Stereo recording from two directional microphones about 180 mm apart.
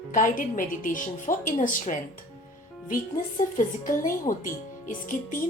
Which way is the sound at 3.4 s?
45° left (ahead or behind).